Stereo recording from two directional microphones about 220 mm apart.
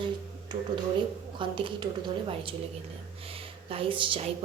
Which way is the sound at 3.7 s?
25° right (ahead or behind).